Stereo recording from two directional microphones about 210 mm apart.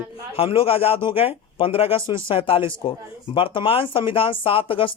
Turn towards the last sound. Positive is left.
turn(degrees=25)  # may be behind; listen again after turning